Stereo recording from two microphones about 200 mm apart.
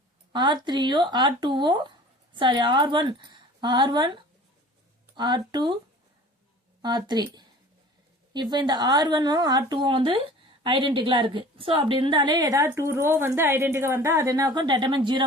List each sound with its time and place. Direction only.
0.3 s a woman's voice: 25° right (ahead or behind)
6.8 s a woman's voice: 20° right (ahead or behind)
8.3 s a woman's voice: 20° right (ahead or behind)